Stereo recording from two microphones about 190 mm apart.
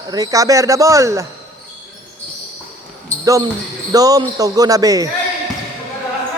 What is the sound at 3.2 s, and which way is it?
Speech, 15° right (ahead or behind).